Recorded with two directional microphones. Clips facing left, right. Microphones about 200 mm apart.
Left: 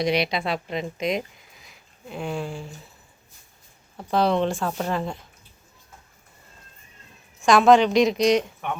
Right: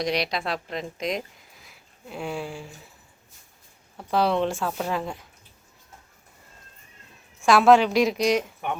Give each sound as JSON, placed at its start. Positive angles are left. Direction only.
{"t": 0.0, "sound": "speech", "side_deg": 0}
{"t": 4.1, "sound": "a woman's voice", "side_deg": -5}
{"t": 7.4, "sound": "a woman's voice", "side_deg": -5}